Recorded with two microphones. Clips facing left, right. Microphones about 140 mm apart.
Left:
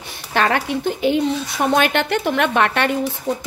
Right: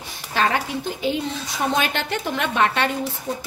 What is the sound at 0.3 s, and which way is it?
A woman's voice, 65° left (ahead or behind).